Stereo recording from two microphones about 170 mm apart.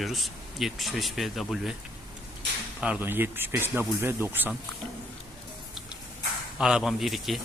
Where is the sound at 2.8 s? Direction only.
10° right (ahead or behind).